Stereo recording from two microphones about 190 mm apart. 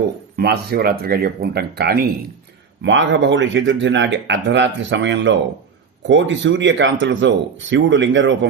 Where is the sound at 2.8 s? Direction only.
70° right (ahead or behind).